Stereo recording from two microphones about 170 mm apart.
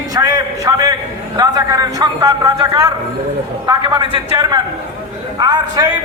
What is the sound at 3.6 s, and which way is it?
A man's voice, 25° right (ahead or behind).